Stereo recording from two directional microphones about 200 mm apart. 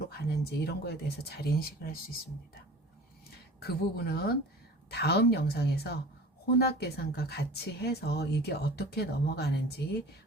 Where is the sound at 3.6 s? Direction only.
50° left (ahead or behind).